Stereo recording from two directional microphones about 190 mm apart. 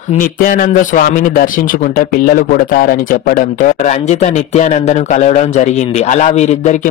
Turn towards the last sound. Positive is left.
turn(degrees=35)  # may be behind; listen again after turning